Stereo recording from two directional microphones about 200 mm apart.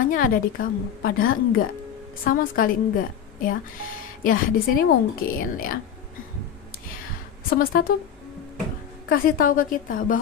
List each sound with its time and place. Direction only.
0.0 s a woman's voice: 45° left (ahead or behind)
7.4 s a woman's voice: 45° left (ahead or behind)
9.1 s a woman's voice: 45° left (ahead or behind)